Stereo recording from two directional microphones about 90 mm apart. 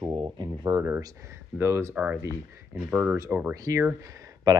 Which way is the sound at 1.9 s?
15° right (ahead or behind).